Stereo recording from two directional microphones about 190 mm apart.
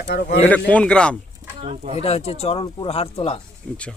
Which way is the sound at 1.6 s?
35° right (ahead or behind).